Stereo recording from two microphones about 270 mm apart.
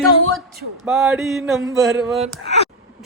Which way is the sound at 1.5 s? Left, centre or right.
Centre.